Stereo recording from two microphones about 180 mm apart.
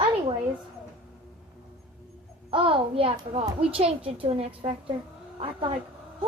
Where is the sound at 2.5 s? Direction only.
30° right (ahead or behind).